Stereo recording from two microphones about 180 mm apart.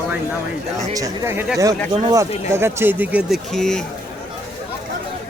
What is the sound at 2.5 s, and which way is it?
Speech, 15° right (ahead or behind).